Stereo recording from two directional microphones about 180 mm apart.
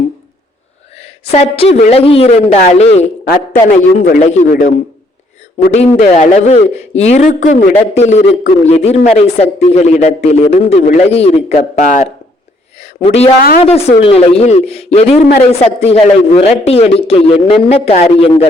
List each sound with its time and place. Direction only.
1.2 s a man's voice: 35° left (ahead or behind)
6.0 s speech: 40° left (ahead or behind)
12.8 s speech: 35° left (ahead or behind)